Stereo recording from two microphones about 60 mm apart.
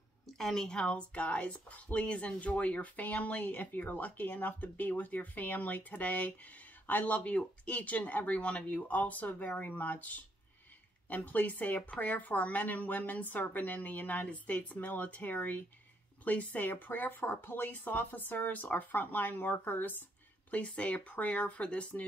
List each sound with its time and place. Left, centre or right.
0.4 s speech: centre; by 20.0 s left
20.5 s speech: left